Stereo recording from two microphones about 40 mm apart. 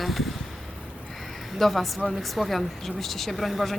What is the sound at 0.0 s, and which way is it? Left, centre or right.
Boat, centre.